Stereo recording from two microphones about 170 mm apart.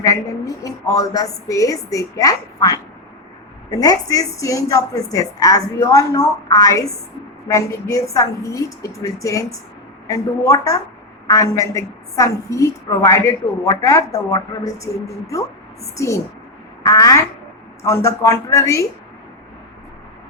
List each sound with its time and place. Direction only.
0.0 s a woman's voice: 20° left (ahead or behind)